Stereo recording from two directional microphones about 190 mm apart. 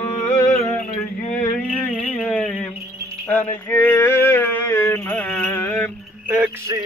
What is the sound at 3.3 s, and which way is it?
Music, 10° left (ahead or behind).